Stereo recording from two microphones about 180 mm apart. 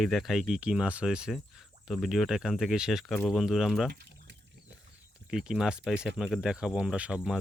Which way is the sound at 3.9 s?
65° right (ahead or behind).